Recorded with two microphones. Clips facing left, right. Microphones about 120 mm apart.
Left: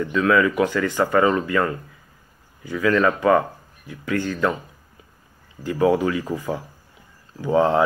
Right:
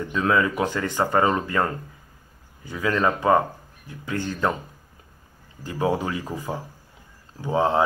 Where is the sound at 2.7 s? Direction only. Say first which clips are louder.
Left 4 dB; 20° right (ahead or behind).